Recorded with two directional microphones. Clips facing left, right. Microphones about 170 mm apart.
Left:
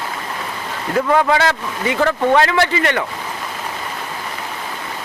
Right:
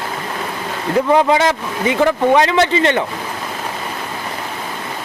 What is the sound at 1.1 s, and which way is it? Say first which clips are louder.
Speech: right 2 dB; 20° right (ahead or behind).